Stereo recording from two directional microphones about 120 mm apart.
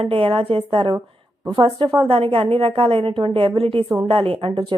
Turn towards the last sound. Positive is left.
turn(degrees=-45)  # may be behind; listen again after turning